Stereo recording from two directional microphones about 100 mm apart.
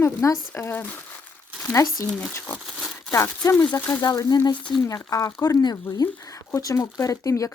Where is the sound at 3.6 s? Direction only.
15° left (ahead or behind).